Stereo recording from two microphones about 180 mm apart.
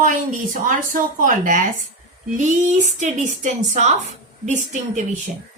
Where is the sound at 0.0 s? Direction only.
50° right (ahead or behind).